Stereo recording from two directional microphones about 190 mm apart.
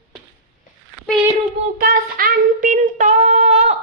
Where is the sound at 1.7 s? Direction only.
50° right (ahead or behind).